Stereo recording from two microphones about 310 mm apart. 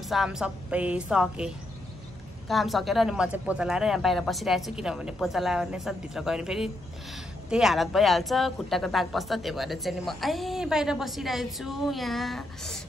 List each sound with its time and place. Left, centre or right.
0.1 s a woman's voice: centre